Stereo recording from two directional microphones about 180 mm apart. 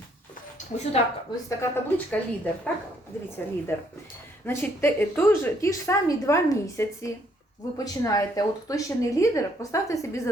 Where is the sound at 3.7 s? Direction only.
15° left (ahead or behind).